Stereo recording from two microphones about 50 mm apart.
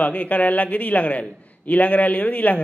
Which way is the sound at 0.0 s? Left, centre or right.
Left.